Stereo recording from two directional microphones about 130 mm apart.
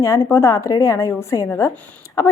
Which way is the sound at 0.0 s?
20° left (ahead or behind).